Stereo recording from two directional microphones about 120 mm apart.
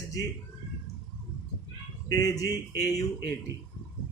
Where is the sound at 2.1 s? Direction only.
30° left (ahead or behind).